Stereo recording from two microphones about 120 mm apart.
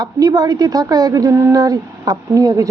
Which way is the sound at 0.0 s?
30° right (ahead or behind).